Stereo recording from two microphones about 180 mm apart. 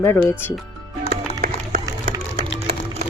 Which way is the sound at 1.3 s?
55° right (ahead or behind).